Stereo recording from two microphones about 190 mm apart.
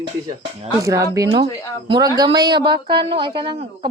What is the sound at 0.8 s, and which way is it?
A woman's voice, 15° right (ahead or behind).